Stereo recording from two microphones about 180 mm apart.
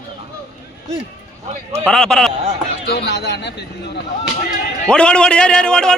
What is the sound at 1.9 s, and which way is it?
Speech, 5° left (ahead or behind).